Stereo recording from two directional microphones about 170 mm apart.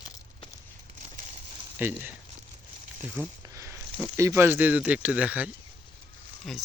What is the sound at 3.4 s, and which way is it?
Speech, 20° right (ahead or behind).